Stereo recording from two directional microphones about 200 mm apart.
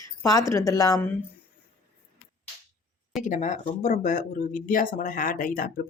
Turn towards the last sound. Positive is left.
turn(degrees=45)  # may be behind; listen again after turning